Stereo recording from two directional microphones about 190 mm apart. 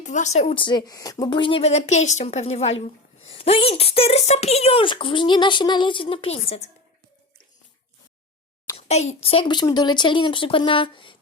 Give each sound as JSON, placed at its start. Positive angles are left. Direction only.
{"t": 0.0, "sound": "speech", "side_deg": 40}
{"t": 8.9, "sound": "a woman's voice", "side_deg": 35}